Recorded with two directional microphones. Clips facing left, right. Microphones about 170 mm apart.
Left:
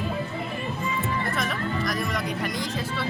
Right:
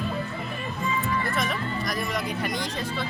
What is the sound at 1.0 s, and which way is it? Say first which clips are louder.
Speech: right 1 dB; centre (ahead or behind).